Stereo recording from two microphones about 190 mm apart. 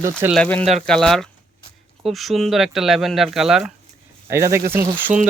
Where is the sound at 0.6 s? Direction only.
35° right (ahead or behind).